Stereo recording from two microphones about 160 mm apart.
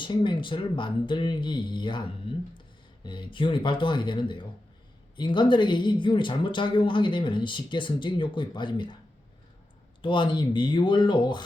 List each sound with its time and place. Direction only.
0.0 s speech: 30° left (ahead or behind)
10.0 s speech: 30° left (ahead or behind)